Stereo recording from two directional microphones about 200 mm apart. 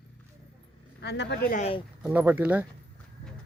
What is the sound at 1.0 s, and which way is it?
Speech, 60° left (ahead or behind).